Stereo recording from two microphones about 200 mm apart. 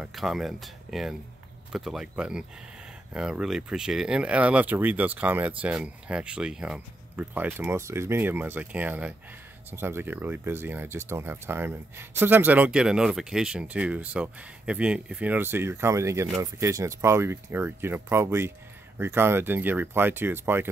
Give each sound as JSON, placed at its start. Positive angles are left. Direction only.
{"t": 0.0, "sound": "speech", "side_deg": 0}